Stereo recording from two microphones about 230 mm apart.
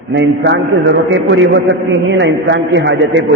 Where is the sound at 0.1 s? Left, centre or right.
Right.